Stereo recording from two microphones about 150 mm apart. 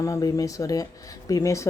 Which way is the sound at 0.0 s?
25° left (ahead or behind).